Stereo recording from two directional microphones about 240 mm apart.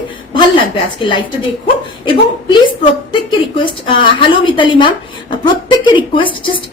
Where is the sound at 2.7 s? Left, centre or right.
Centre.